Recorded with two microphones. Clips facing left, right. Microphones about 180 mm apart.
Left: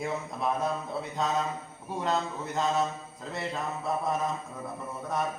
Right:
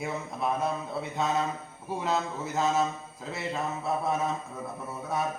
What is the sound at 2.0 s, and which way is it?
Mantra, 5° right (ahead or behind).